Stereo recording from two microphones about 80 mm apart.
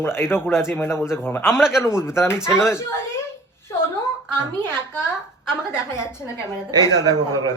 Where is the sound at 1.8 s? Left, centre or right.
Left.